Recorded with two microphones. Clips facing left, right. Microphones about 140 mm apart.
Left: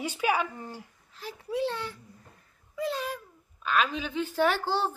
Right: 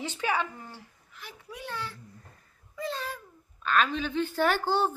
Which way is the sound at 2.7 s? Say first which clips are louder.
Left 3 dB; 5° left (ahead or behind).